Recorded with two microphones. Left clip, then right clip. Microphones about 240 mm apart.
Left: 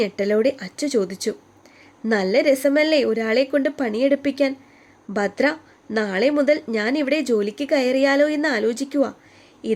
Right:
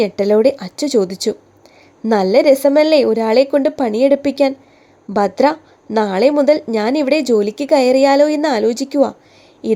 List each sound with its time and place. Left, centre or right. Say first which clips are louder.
0.0 s a woman's voice: right 7 dB; centre